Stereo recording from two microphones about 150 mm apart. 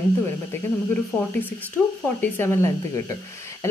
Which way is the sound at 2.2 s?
15° left (ahead or behind).